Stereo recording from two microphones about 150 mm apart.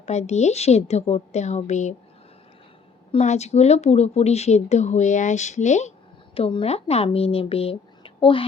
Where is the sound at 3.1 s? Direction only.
45° left (ahead or behind).